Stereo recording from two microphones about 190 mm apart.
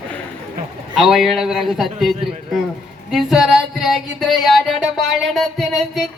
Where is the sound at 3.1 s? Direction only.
Centre (ahead or behind).